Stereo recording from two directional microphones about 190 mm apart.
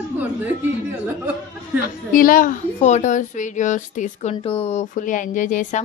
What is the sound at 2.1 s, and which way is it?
A woman's voice, 45° left (ahead or behind).